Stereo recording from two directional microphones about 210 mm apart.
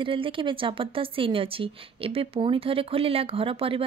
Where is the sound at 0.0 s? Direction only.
25° right (ahead or behind).